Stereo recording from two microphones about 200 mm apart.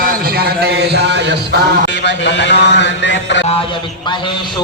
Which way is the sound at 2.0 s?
65° left (ahead or behind).